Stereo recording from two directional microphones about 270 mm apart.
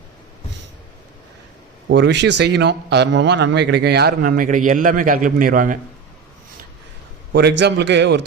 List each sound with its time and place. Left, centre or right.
1.9 s a man's voice: right
7.3 s a man's voice: right